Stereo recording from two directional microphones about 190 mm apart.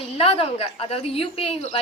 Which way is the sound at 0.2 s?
30° left (ahead or behind).